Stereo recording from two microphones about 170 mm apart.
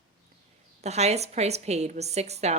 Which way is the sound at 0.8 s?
40° right (ahead or behind).